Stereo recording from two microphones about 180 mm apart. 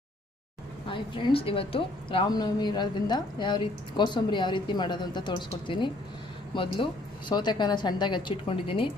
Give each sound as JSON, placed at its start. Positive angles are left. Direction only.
{"t": 0.9, "sound": "a woman's voice", "side_deg": 30}